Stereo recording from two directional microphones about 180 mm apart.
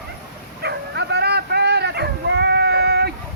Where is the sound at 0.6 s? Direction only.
65° right (ahead or behind).